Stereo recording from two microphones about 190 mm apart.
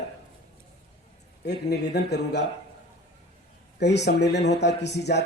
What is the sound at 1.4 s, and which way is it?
A man's voice, 60° left (ahead or behind).